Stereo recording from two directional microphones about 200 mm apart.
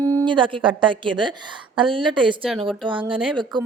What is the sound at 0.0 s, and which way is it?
A woman's voice, 15° right (ahead or behind).